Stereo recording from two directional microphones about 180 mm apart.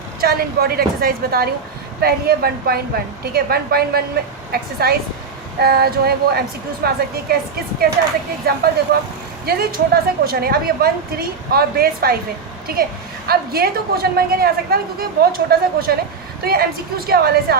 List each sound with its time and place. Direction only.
0.2 s a woman's voice: 60° right (ahead or behind)
8.4 s a woman's voice: 60° right (ahead or behind)